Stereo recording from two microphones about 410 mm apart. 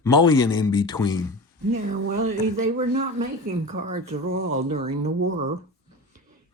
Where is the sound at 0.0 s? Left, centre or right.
Centre.